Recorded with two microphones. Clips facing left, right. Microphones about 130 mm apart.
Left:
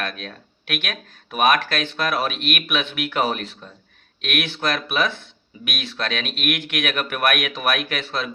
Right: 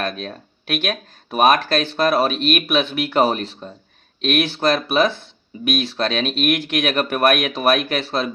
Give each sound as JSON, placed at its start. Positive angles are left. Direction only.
{"t": 0.0, "sound": "speech", "side_deg": -30}